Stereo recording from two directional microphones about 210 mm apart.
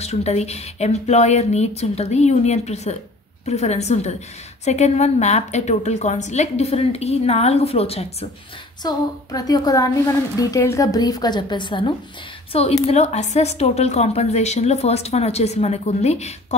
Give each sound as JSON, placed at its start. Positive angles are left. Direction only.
{"t": 0.0, "sound": "a woman's voice", "side_deg": 30}
{"t": 8.8, "sound": "a woman's voice", "side_deg": 20}